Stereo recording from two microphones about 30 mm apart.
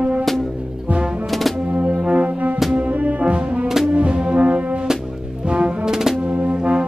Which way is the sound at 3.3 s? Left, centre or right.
Right.